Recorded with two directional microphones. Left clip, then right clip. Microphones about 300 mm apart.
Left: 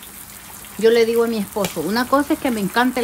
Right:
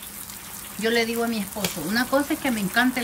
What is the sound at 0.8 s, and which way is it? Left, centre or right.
Speech, centre.